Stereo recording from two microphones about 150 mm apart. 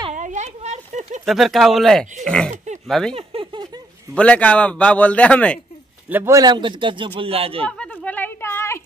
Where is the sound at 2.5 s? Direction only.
50° right (ahead or behind).